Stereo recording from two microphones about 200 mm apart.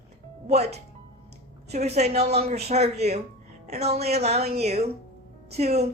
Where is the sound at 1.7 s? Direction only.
35° right (ahead or behind).